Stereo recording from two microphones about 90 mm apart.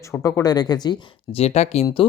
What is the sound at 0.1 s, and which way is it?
Speech, 35° left (ahead or behind).